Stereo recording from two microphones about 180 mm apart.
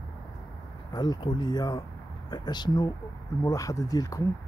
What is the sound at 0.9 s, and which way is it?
Speech, 20° left (ahead or behind).